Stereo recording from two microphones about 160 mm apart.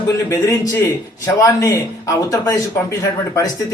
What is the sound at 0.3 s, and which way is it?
A man's voice, 20° left (ahead or behind).